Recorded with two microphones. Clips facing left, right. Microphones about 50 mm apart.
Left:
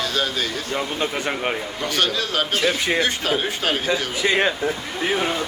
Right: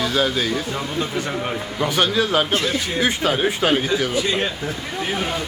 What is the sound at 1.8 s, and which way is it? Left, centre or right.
Speech, centre.